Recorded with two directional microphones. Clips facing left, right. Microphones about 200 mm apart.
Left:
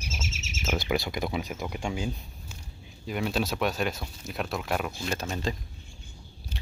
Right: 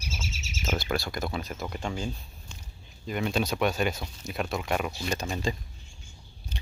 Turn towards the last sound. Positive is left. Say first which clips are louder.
# right 1 dB
turn(degrees=0)  # may be behind; listen again after turning